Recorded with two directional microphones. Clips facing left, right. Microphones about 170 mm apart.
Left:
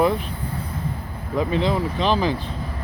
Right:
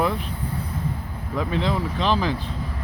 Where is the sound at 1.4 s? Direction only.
Centre (ahead or behind).